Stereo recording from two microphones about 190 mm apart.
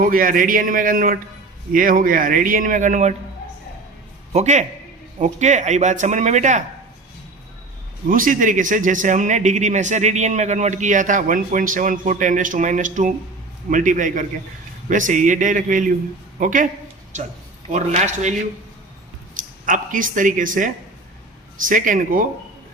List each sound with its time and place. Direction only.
0.0 s speech: 45° right (ahead or behind)
4.3 s a man's voice: 40° right (ahead or behind)
8.1 s a man's voice: 45° right (ahead or behind)
17.7 s a man's voice: 40° right (ahead or behind)